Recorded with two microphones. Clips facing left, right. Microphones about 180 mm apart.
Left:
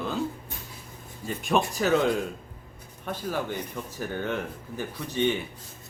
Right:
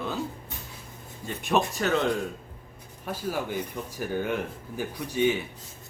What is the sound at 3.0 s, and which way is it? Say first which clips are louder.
Speech: even; 5° right (ahead or behind).